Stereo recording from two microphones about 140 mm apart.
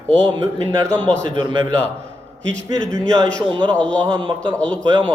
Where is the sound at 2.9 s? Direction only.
20° right (ahead or behind).